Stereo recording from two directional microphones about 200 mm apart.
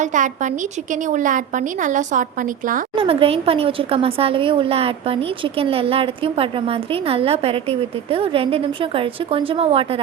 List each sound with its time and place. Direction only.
0.0 s a woman's voice: 40° right (ahead or behind)
2.9 s speech: 25° right (ahead or behind)